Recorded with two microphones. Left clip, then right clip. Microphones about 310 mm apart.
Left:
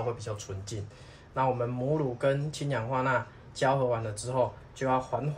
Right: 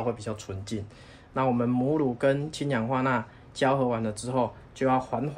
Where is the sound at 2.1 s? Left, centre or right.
Right.